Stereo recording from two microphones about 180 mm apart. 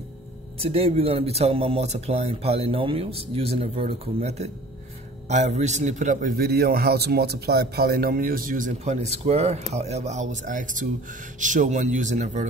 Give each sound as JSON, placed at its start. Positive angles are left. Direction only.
{"t": 0.6, "sound": "a man's voice", "side_deg": -35}